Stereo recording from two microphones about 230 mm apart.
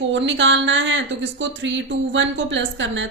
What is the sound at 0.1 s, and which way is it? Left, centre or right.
A woman's voice, right.